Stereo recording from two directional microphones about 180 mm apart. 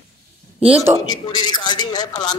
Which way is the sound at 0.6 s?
10° right (ahead or behind).